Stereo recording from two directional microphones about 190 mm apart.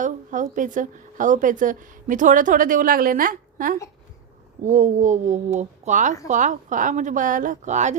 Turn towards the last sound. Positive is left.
turn(degrees=-40)  # may be behind; listen again after turning